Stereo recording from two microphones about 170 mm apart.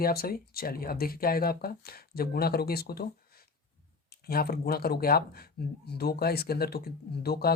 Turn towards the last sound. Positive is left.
turn(degrees=65)  # may be behind; listen again after turning